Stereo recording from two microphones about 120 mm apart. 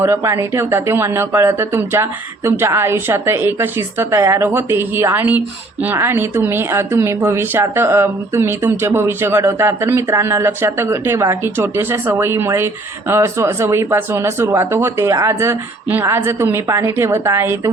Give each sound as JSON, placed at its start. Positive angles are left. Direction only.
{"t": 0.0, "sound": "a woman's voice", "side_deg": -25}